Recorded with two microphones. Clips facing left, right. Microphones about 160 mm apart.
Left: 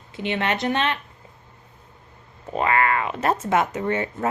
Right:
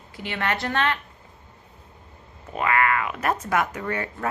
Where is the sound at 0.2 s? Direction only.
20° left (ahead or behind).